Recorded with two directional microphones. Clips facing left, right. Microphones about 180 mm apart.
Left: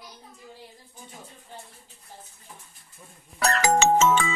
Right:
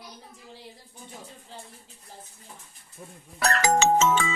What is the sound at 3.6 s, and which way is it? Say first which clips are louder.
Music: left 1 dB; 55° left (ahead or behind).